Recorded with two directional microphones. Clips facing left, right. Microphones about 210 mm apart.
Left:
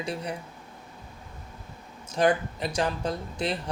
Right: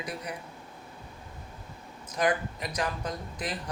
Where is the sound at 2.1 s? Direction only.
30° left (ahead or behind).